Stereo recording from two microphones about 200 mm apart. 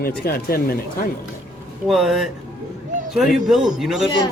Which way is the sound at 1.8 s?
Centre (ahead or behind).